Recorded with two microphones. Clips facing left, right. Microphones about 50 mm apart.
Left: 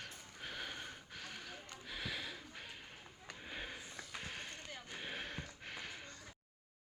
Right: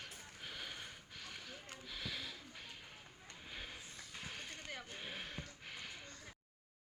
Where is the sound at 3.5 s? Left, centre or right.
Centre.